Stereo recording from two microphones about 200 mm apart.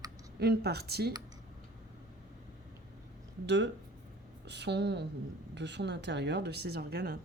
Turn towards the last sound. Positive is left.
turn(degrees=-50)  # may be behind; listen again after turning